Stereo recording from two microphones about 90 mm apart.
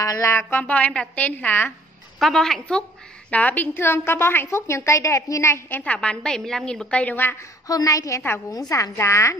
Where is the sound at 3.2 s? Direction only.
15° left (ahead or behind).